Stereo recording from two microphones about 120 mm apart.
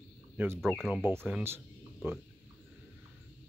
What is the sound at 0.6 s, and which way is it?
Speech, centre (ahead or behind).